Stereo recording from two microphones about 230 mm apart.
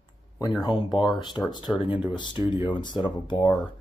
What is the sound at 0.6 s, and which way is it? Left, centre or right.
Speech, centre.